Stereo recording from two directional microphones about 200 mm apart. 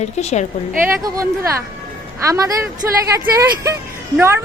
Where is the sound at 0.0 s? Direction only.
35° left (ahead or behind).